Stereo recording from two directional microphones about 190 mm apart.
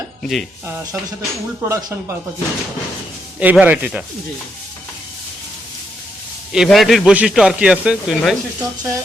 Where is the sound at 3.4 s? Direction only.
10° right (ahead or behind).